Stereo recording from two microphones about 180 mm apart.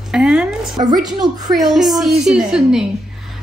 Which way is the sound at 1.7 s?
Centre (ahead or behind).